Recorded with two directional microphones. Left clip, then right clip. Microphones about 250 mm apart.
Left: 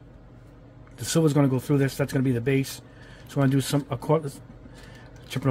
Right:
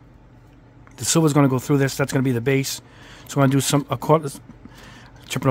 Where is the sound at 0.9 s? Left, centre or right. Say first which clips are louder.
Right 4 dB; right.